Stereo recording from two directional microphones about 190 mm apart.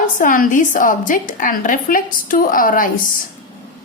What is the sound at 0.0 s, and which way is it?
A woman's voice, 45° left (ahead or behind).